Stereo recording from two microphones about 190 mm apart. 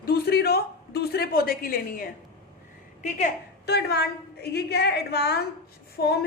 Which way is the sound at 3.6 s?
60° left (ahead or behind).